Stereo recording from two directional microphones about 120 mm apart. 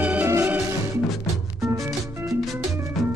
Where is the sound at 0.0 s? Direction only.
10° right (ahead or behind).